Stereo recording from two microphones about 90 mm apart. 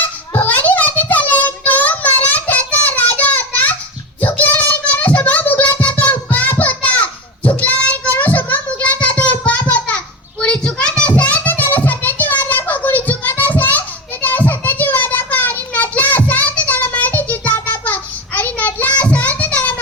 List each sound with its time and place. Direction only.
0.3 s child singing: 15° left (ahead or behind)
8.1 s a sound: 20° left (ahead or behind)
10.4 s child singing: 10° left (ahead or behind)